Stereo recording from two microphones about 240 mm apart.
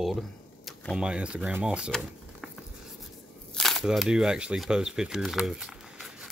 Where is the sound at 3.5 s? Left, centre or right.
Centre.